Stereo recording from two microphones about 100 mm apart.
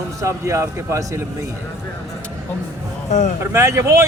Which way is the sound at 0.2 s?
30° right (ahead or behind).